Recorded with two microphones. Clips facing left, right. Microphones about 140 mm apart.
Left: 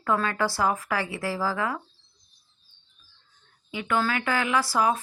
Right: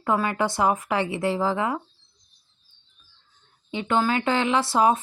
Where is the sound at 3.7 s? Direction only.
25° right (ahead or behind).